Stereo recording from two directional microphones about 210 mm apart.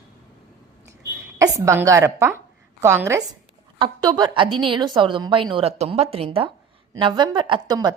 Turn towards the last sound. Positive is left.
turn(degrees=-20)  # may be behind; listen again after turning